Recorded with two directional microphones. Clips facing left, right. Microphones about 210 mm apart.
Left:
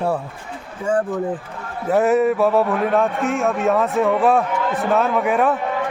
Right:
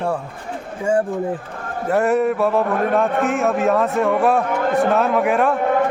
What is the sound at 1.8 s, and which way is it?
Speech, centre (ahead or behind).